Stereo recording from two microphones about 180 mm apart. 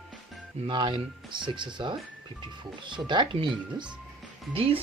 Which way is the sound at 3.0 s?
25° right (ahead or behind).